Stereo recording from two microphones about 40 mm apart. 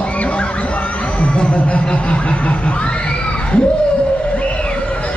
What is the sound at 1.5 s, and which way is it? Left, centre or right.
Crowd, left.